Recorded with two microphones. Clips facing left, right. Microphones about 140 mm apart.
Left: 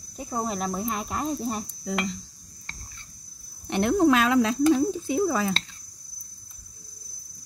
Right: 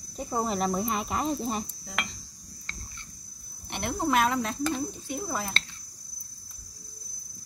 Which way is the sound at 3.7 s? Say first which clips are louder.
Left 8 dB; 90° left.